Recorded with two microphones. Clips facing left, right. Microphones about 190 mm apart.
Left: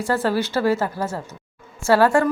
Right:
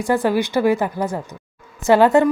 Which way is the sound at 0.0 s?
15° right (ahead or behind).